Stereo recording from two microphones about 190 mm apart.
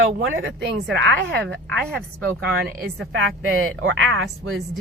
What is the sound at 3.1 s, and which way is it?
A woman's voice, 85° right.